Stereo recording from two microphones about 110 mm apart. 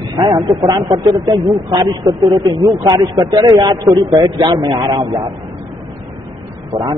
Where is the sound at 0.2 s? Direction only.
40° right (ahead or behind).